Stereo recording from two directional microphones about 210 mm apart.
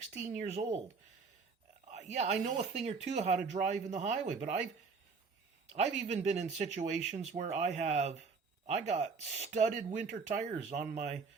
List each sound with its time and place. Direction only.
0.2 s speech: 35° right (ahead or behind)
1.9 s speech: 30° right (ahead or behind)
5.7 s speech: 35° right (ahead or behind)